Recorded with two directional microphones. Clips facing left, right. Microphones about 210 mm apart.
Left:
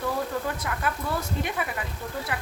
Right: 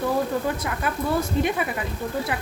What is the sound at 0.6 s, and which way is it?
Speech, 20° right (ahead or behind).